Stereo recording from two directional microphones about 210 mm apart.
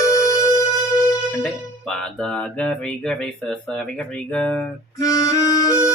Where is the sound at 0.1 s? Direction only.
15° left (ahead or behind).